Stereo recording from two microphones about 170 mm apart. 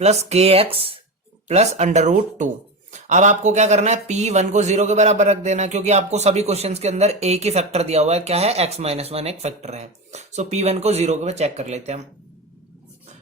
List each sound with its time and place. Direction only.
0.0 s speech: 40° right (ahead or behind)